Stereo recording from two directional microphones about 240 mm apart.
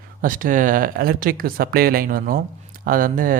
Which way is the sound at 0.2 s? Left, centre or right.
Right.